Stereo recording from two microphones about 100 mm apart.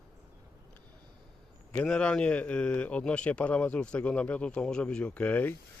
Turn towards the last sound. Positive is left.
turn(degrees=15)  # may be behind; listen again after turning